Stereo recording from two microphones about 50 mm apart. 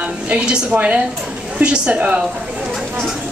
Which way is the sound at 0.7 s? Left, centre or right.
Right.